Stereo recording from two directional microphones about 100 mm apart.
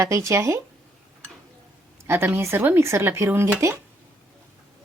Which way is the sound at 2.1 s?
25° right (ahead or behind).